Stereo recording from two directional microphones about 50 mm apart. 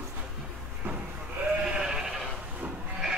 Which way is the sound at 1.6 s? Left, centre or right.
Centre.